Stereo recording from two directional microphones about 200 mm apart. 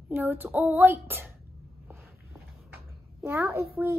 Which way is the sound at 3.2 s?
10° right (ahead or behind).